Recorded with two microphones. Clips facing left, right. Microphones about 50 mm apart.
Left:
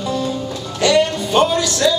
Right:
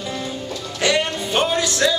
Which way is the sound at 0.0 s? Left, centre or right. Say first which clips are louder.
Left 6 dB; right.